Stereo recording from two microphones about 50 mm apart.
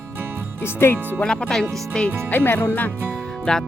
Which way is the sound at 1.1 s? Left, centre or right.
Centre.